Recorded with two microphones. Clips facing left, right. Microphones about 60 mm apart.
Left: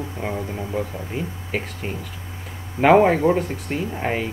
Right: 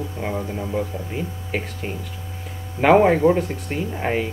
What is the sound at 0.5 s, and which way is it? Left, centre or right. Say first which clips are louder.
Speech: right 1 dB; centre.